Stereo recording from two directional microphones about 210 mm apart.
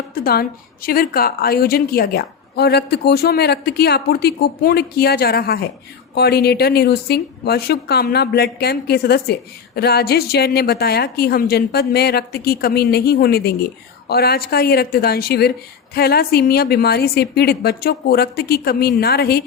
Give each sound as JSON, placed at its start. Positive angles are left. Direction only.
{"t": 0.1, "sound": "speech", "side_deg": 45}